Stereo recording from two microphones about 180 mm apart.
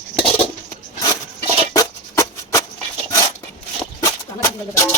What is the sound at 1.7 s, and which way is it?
Music, 20° left (ahead or behind).